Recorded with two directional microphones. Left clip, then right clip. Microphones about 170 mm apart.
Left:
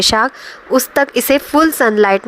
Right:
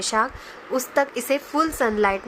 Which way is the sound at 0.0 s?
50° left (ahead or behind).